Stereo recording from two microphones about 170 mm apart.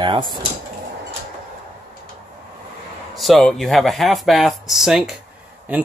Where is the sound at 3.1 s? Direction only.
Centre (ahead or behind).